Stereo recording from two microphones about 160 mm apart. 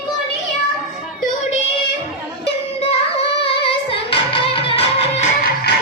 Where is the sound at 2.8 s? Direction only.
35° left (ahead or behind).